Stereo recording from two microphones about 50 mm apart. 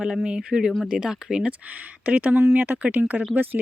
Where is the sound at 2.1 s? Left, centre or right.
Right.